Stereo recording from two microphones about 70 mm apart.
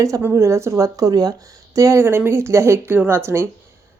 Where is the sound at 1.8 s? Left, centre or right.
Right.